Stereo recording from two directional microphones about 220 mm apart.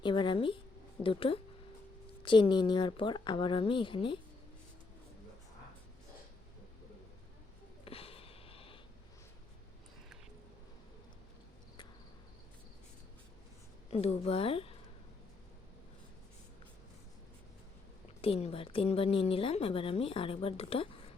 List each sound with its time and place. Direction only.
0.0 s a woman's voice: 20° left (ahead or behind)
7.9 s a sound: 25° left (ahead or behind)
13.9 s a woman's voice: 25° left (ahead or behind)
18.2 s a woman's voice: 25° left (ahead or behind)